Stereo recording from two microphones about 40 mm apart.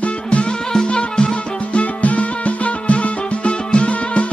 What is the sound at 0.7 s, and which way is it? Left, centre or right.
Music, left.